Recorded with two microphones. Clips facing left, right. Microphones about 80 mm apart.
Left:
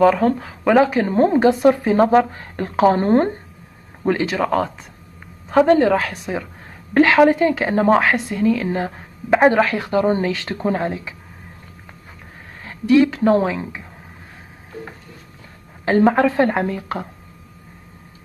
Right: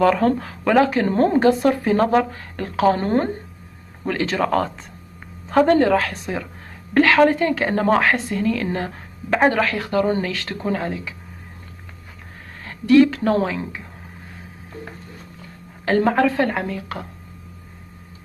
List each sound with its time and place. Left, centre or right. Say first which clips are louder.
0.0 s a woman's voice: left 2 dB; centre; by 3.3 s left
4.0 s speech: left 3 dB; centre
4.4 s a woman's voice: left 1 dB; centre; by 11.1 s left
12.6 s a woman's voice: right 1 dB; centre
15.8 s a woman's voice: left 2 dB; centre